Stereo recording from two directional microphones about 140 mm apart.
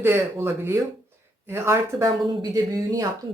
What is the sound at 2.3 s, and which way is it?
Speech, 30° right (ahead or behind).